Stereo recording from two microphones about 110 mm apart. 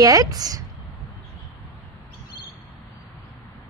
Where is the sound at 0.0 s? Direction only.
35° right (ahead or behind).